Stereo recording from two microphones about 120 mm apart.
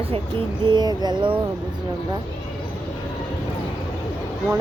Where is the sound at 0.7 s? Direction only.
35° right (ahead or behind).